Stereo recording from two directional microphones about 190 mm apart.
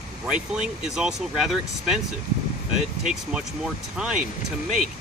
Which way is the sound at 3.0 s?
5° right (ahead or behind).